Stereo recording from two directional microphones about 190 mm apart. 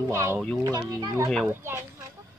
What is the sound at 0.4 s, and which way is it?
Speech, centre (ahead or behind).